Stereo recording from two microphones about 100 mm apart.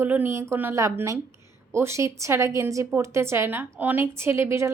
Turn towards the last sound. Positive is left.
turn(degrees=-25)  # may be behind; listen again after turning